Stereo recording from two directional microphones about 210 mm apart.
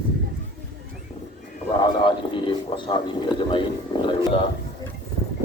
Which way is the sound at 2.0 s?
25° left (ahead or behind).